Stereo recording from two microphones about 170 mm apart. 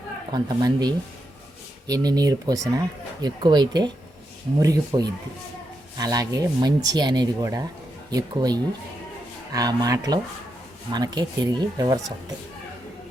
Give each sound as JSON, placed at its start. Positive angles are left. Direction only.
{"t": 0.3, "sound": "speech", "side_deg": -25}